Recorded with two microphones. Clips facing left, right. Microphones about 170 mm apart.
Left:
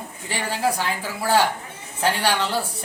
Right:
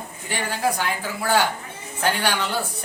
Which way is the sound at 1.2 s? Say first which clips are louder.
Left 2 dB; 30° left (ahead or behind).